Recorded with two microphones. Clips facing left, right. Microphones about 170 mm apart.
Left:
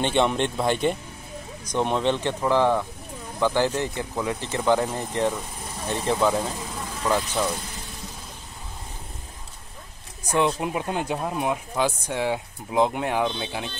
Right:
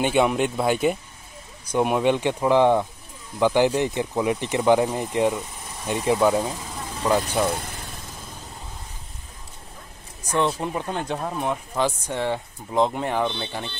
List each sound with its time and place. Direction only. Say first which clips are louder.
0.0 s speech: right 2 dB; 5° right (ahead or behind)
7.4 s vehicle: right 3 dB; 55° right (ahead or behind)
10.3 s speech: even; 10° left (ahead or behind)